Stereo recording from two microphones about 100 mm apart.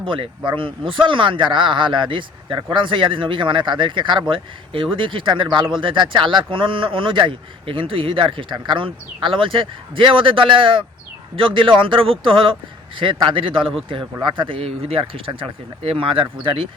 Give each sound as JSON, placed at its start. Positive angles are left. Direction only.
{"t": 0.0, "sound": "speech", "side_deg": -60}